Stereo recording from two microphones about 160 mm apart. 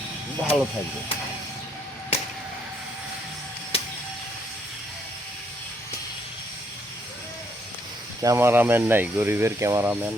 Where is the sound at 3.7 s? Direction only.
40° left (ahead or behind).